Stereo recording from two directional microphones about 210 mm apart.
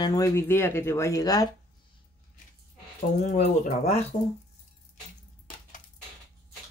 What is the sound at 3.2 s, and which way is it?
Speech, 35° left (ahead or behind).